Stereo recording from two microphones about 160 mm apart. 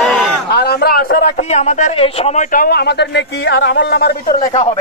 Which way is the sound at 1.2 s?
45° left (ahead or behind).